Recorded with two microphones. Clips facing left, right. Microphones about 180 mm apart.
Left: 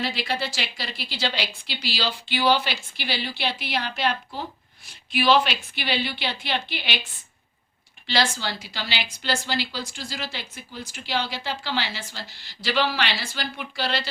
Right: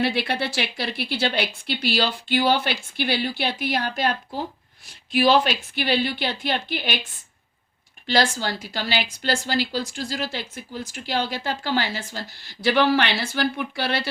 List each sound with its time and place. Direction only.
0.0 s a woman's voice: 60° right (ahead or behind)
8.0 s a woman's voice: 45° right (ahead or behind)